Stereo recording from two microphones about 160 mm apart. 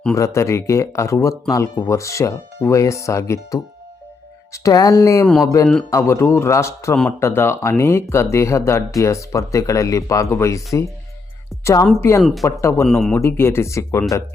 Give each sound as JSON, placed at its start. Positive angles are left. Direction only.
{"t": 0.1, "sound": "speech", "side_deg": 20}
{"t": 12.2, "sound": "speech", "side_deg": 0}
{"t": 12.5, "sound": "speech", "side_deg": 15}
{"t": 12.8, "sound": "speech", "side_deg": 0}
{"t": 13.1, "sound": "speech", "side_deg": 15}